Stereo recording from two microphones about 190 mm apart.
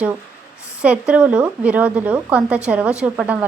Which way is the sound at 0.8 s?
5° right (ahead or behind).